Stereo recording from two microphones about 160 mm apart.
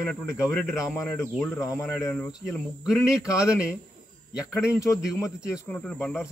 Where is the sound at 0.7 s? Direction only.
5° right (ahead or behind).